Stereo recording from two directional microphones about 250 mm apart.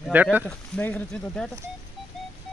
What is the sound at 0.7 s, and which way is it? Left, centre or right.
Speech, centre.